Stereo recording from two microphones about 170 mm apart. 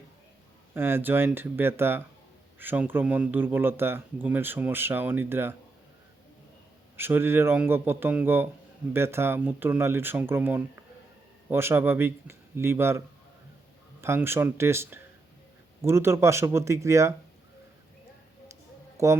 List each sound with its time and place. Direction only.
0.7 s speech: 15° right (ahead or behind)
6.9 s speech: 15° right (ahead or behind)
14.0 s speech: 15° right (ahead or behind)
19.0 s speech: 15° right (ahead or behind)